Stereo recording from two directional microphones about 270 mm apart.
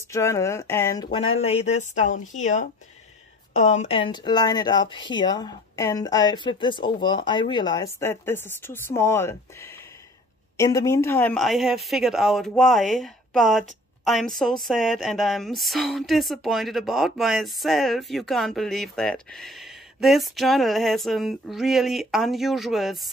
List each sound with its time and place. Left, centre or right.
0.1 s speech: centre
1.4 s speech: left; by 23.0 s centre